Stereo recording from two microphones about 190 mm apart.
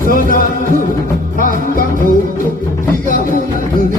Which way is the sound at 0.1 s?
45° left (ahead or behind).